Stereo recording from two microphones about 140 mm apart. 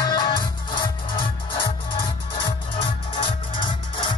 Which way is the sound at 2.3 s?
35° left (ahead or behind).